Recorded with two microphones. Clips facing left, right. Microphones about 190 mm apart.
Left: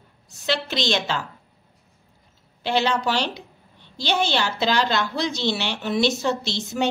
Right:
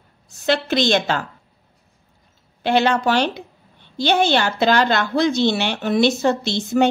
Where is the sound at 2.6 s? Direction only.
55° right (ahead or behind).